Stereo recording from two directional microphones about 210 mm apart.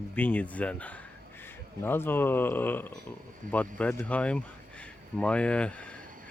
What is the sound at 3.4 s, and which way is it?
Speech, 40° right (ahead or behind).